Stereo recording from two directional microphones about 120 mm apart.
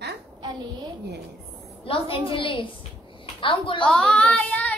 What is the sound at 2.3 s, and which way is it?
A woman's voice, 45° left (ahead or behind).